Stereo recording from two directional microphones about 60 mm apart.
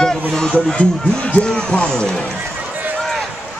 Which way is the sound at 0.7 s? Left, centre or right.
Centre.